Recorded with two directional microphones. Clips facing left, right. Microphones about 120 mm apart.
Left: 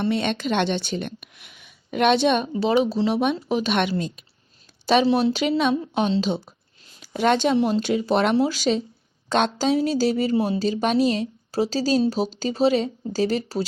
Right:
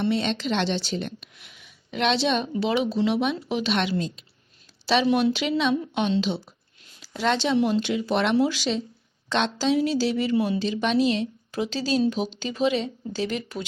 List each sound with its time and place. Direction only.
0.0 s speech: 50° left (ahead or behind)
2.5 s speech: 40° left (ahead or behind)
5.0 s speech: 35° left (ahead or behind)